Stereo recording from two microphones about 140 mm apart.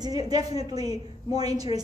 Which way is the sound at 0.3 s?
30° right (ahead or behind).